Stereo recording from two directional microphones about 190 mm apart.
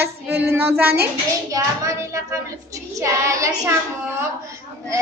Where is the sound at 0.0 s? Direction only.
60° right (ahead or behind).